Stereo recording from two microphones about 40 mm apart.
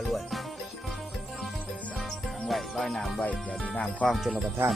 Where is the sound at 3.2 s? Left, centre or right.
Left.